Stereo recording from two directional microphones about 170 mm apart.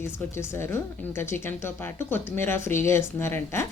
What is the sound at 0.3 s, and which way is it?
Speech, 15° left (ahead or behind).